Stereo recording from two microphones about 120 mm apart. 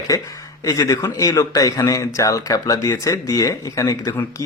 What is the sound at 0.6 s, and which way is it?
Speech, 30° left (ahead or behind).